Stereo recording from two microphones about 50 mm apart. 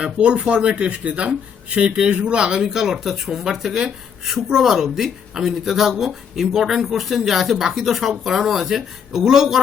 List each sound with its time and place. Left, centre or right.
0.0 s speech: right